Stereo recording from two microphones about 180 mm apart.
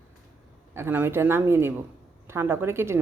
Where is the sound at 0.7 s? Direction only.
10° right (ahead or behind).